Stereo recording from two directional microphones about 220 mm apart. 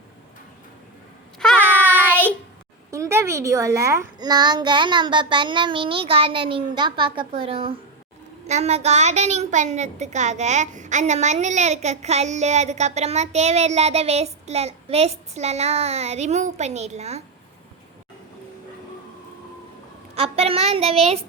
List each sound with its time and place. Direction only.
1.4 s a sound: 5° left (ahead or behind)
1.7 s child singing: 10° right (ahead or behind)
2.9 s a woman's voice: 15° right (ahead or behind); by 17.2 s 30° right (ahead or behind)
20.1 s a woman's voice: 25° right (ahead or behind)